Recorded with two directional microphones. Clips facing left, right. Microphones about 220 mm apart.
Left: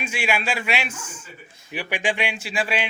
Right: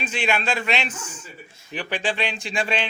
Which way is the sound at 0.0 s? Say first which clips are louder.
Right 1 dB; 10° left (ahead or behind).